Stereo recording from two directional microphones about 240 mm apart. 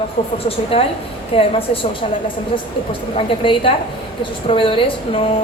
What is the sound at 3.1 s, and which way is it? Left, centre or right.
A woman's voice, left.